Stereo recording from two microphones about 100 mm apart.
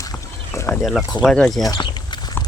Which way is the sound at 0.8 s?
Centre (ahead or behind).